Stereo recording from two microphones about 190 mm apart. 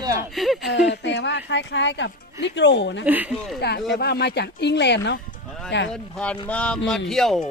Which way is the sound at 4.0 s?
60° left (ahead or behind).